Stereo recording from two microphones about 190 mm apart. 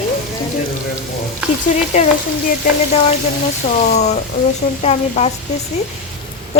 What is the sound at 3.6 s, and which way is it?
Speech, 30° left (ahead or behind).